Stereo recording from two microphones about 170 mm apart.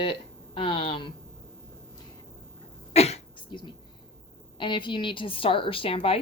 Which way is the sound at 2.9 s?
40° left (ahead or behind).